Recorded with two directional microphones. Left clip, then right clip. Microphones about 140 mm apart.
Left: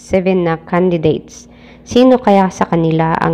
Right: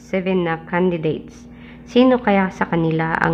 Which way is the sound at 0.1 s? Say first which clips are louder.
Left 7 dB; 40° left (ahead or behind).